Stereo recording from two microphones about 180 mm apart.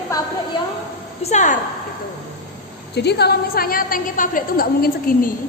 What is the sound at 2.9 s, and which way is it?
A woman's voice, 65° left (ahead or behind).